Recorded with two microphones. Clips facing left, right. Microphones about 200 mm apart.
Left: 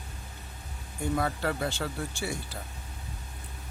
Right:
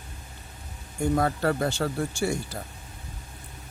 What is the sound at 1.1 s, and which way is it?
Speech, 45° right (ahead or behind).